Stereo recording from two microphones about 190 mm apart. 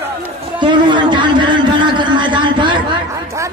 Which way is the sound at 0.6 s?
25° right (ahead or behind).